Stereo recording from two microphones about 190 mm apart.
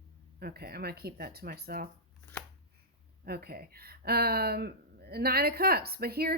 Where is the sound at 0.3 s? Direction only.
55° right (ahead or behind).